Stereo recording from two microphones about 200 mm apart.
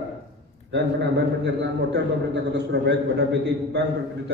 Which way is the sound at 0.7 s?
60° right (ahead or behind).